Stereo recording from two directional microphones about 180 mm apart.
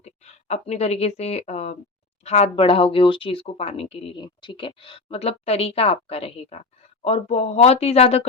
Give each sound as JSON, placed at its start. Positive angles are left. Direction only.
{"t": 0.0, "sound": "a woman's voice", "side_deg": 35}